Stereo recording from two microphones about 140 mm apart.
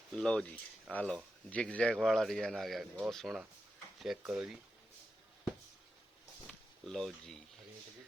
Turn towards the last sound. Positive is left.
turn(degrees=5)  # may be behind; listen again after turning